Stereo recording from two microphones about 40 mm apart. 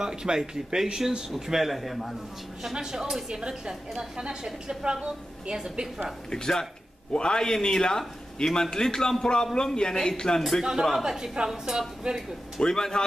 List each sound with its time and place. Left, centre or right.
0.0 s a man's voice: centre
2.7 s a man's voice: centre
5.5 s a man's voice: centre
6.3 s a man's voice: centre
10.6 s speech: centre
11.1 s a man's voice: centre
12.5 s a man's voice: centre